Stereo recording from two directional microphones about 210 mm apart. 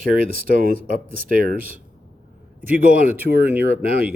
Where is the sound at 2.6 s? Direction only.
10° right (ahead or behind).